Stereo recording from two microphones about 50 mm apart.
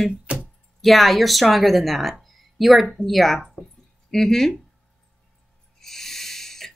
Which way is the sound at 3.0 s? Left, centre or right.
Centre.